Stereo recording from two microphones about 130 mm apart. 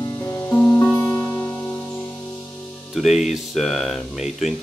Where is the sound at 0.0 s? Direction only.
25° left (ahead or behind).